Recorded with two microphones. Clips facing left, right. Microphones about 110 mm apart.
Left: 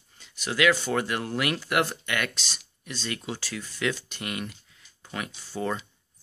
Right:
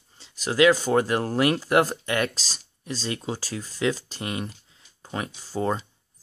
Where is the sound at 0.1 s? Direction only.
35° right (ahead or behind).